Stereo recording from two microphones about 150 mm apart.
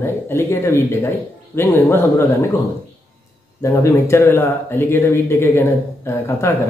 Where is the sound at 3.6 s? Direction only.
20° left (ahead or behind).